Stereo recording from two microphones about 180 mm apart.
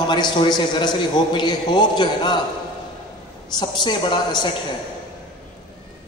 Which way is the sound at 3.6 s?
25° left (ahead or behind).